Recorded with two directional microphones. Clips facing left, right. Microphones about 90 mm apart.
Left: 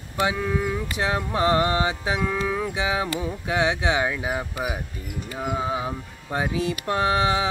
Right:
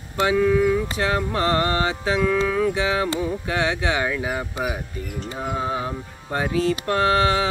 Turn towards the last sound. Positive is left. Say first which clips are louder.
# right 2 dB
turn(degrees=15)  # may be behind; listen again after turning